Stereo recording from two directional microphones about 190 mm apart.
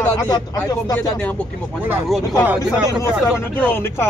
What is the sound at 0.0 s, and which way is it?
Speech, 20° left (ahead or behind).